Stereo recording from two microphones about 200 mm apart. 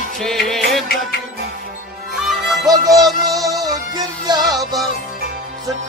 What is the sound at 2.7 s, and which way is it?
Music, 20° right (ahead or behind).